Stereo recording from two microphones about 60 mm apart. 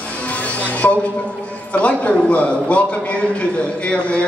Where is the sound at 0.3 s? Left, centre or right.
Left.